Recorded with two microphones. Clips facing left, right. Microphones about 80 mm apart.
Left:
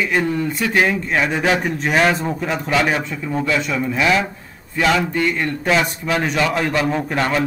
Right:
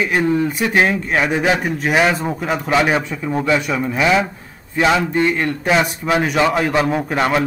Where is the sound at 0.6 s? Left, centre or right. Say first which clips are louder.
Right 2 dB; right.